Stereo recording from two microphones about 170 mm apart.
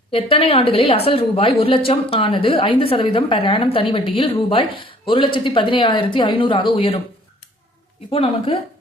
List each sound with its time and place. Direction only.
0.1 s a woman's voice: 35° left (ahead or behind)
8.1 s a woman's voice: 35° left (ahead or behind)